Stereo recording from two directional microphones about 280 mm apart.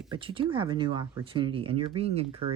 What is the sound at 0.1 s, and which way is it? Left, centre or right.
Speech, centre.